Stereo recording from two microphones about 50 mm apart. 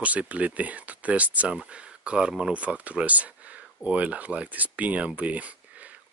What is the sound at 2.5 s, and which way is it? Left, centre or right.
Speech, right.